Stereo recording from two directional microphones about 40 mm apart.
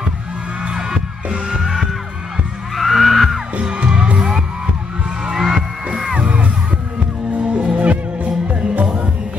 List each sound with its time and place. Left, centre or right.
0.7 s music: centre
2.7 s heart sounds: centre
3.5 s music: right
5.3 s music: centre
6.1 s music: right